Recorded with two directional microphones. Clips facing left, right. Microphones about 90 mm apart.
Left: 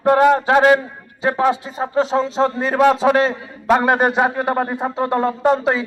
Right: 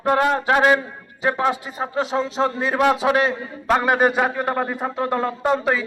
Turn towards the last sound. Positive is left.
turn(degrees=25)  # may be behind; listen again after turning